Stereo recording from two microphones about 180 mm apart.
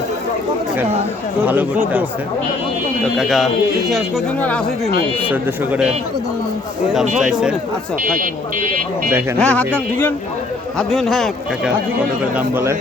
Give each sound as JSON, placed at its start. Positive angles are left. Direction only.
{"t": 1.5, "sound": "speech", "side_deg": -10}
{"t": 3.2, "sound": "speech", "side_deg": 0}
{"t": 5.3, "sound": "speech", "side_deg": -10}
{"t": 7.2, "sound": "speech", "side_deg": -5}
{"t": 8.0, "sound": "speech", "side_deg": -50}
{"t": 9.4, "sound": "speech", "side_deg": 5}
{"t": 12.2, "sound": "speech", "side_deg": -10}